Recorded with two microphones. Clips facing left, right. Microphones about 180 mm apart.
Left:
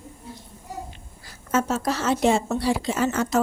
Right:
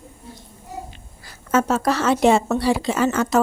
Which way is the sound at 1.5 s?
70° right (ahead or behind).